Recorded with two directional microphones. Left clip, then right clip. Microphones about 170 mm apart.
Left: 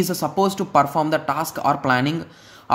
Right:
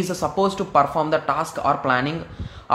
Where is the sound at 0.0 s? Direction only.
30° left (ahead or behind).